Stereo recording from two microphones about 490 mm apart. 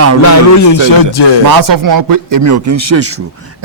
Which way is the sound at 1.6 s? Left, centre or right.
Right.